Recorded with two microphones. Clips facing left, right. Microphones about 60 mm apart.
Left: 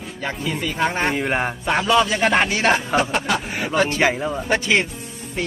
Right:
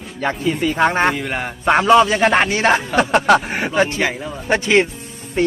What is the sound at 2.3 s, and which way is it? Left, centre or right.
Speech, centre.